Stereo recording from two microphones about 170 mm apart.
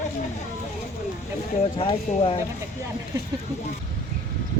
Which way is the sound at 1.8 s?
30° left (ahead or behind).